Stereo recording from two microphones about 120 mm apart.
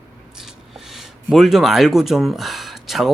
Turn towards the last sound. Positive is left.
turn(degrees=0)  # may be behind; listen again after turning